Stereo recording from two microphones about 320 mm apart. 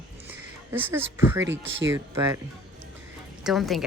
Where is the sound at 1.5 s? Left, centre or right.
Right.